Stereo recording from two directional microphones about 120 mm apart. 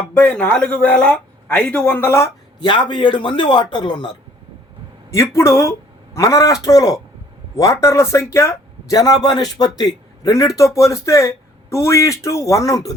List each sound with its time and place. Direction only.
0.1 s speech: 10° left (ahead or behind)
2.6 s a man's voice: 45° left (ahead or behind)
5.1 s a man's voice: 25° left (ahead or behind)